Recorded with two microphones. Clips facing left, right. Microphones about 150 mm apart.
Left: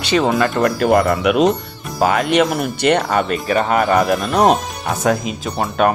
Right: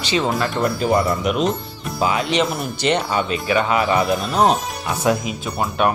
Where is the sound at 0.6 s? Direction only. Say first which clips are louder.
Left 3 dB; 70° left (ahead or behind).